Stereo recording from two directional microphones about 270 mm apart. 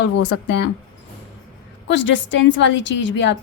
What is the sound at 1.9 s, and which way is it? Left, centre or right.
A woman's voice, left.